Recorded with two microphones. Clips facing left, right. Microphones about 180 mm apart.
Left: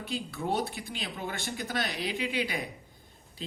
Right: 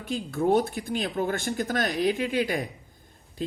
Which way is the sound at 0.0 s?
50° right (ahead or behind).